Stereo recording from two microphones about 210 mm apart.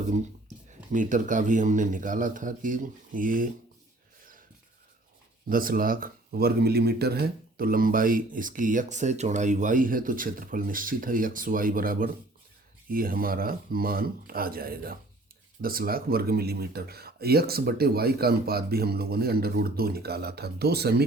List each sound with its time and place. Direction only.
0.1 s speech: 35° right (ahead or behind)
5.5 s speech: 40° right (ahead or behind)